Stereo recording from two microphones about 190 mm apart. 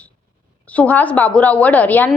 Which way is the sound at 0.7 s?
10° left (ahead or behind).